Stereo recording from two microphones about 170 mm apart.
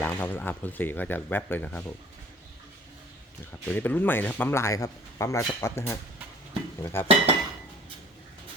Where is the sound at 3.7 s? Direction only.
10° left (ahead or behind).